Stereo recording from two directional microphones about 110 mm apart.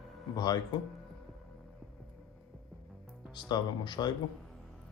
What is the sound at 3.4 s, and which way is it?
Speech, 40° left (ahead or behind).